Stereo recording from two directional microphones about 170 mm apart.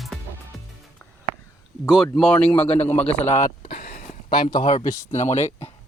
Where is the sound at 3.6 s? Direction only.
55° left (ahead or behind).